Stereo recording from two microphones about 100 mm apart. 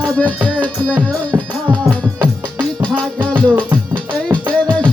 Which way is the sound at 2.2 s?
10° left (ahead or behind).